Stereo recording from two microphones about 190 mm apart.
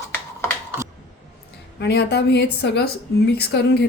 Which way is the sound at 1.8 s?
60° left (ahead or behind).